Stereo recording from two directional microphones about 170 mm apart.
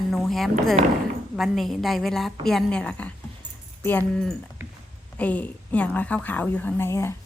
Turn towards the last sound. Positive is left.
turn(degrees=15)  # may be behind; listen again after turning